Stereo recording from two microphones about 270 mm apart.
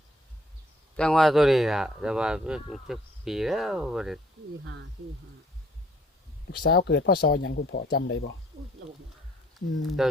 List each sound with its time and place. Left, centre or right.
0.9 s speech: centre
6.6 s speech: left
9.6 s speech: centre